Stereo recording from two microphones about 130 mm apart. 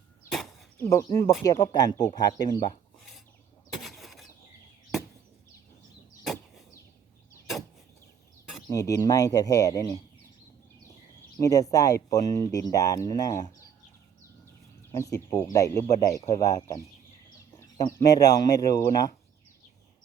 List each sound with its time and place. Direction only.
0.8 s speech: 25° left (ahead or behind)
3.7 s vehicle: centre (ahead or behind)
8.6 s speech: 25° left (ahead or behind)
11.3 s speech: 25° left (ahead or behind)
14.9 s speech: 25° left (ahead or behind)
17.9 s speech: 30° left (ahead or behind)